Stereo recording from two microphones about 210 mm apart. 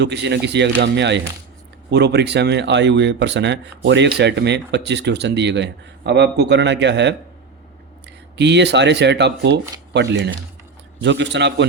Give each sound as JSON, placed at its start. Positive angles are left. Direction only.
{"t": 0.0, "sound": "speech", "side_deg": -55}